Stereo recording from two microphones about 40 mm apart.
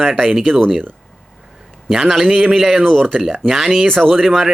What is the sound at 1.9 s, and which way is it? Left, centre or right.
Speech, centre.